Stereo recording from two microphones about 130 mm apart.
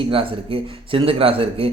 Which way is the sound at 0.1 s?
45° right (ahead or behind).